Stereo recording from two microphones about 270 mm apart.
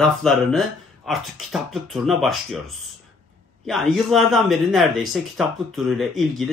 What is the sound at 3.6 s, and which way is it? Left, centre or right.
Speech, centre.